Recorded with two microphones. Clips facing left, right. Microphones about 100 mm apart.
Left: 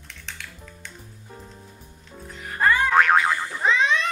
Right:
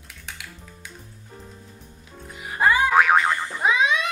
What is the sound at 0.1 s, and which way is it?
Music, 10° right (ahead or behind).